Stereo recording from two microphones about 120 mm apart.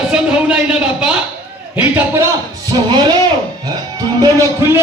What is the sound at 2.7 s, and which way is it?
Speech, 40° right (ahead or behind).